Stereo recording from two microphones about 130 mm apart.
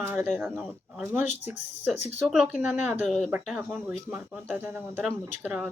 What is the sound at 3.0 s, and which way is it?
Speech, centre (ahead or behind).